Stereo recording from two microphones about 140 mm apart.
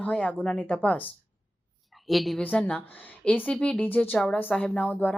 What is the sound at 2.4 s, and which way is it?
Speech, 10° left (ahead or behind).